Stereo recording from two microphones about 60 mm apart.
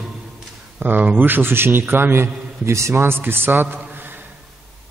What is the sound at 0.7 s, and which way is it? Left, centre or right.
A man's voice, right.